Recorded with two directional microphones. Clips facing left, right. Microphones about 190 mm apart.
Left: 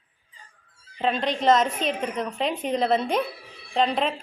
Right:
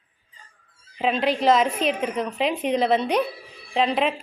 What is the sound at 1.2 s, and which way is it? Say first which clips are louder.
A woman's voice: right 2 dB; 5° right (ahead or behind).